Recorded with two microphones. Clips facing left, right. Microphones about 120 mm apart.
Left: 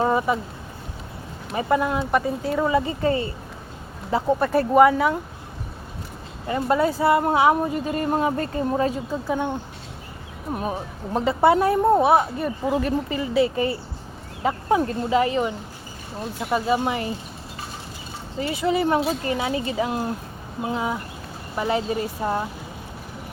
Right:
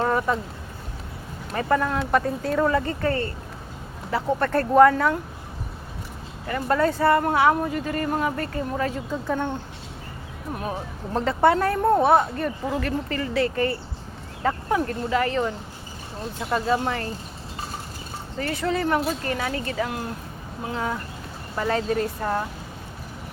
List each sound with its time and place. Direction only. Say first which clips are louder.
0.0 s a sound: left 2 dB; 15° left (ahead or behind)
1.5 s speech: left 1 dB; 10° left (ahead or behind)
6.5 s speech: left 1 dB; 15° left (ahead or behind)
9.2 s speech: left 1 dB; 10° left (ahead or behind)
10.6 s speech: left 1 dB; 10° left (ahead or behind)
12.6 s speech: left 7 dB; 15° left (ahead or behind)
18.3 s speech: left 3 dB; 10° left (ahead or behind)